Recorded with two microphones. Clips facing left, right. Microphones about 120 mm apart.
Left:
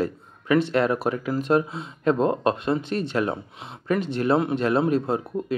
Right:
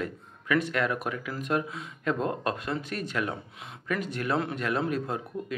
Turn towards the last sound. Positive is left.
turn(degrees=30)  # may be behind; listen again after turning